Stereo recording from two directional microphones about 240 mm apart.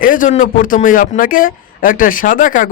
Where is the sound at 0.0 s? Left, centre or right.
Left.